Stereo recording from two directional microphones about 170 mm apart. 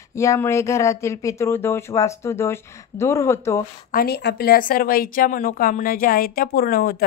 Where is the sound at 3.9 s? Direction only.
65° left (ahead or behind).